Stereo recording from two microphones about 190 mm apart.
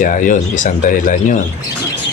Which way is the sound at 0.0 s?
45° left (ahead or behind).